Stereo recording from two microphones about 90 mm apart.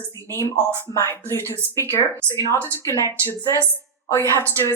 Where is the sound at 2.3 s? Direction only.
35° right (ahead or behind).